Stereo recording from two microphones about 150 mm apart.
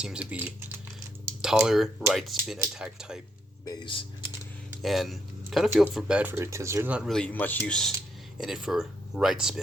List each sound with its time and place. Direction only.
0.0 s speech: 5° right (ahead or behind)
3.7 s speech: 35° left (ahead or behind)
4.8 s speech: centre (ahead or behind)
7.1 s speech: 10° left (ahead or behind)